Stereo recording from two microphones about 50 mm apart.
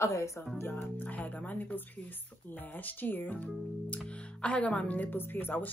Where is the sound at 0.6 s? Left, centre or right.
Left.